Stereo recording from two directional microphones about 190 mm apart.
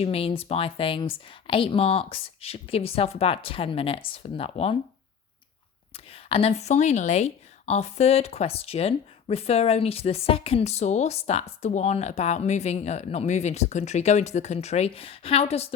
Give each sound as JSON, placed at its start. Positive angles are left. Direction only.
{"t": 0.0, "sound": "speech", "side_deg": 30}
{"t": 6.1, "sound": "a woman's voice", "side_deg": 30}